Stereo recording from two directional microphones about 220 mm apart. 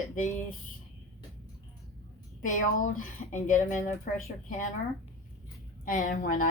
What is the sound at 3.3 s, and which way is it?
A woman's voice, 35° left (ahead or behind).